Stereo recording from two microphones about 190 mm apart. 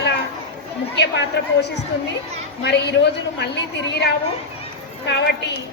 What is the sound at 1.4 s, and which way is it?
Speech, 60° left (ahead or behind).